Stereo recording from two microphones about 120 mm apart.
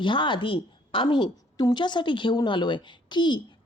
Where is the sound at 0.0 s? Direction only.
40° left (ahead or behind).